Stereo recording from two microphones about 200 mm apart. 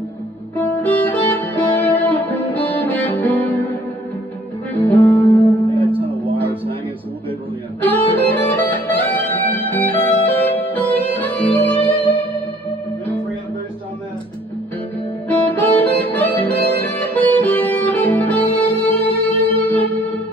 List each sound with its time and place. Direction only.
0.6 s music: 10° left (ahead or behind)
4.7 s music: 10° left (ahead or behind)
5.8 s music: 25° right (ahead or behind)
7.8 s music: 10° left (ahead or behind)
15.2 s music: 10° left (ahead or behind)